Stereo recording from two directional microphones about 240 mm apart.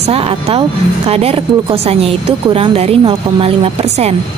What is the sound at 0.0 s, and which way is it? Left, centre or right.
Speech, right.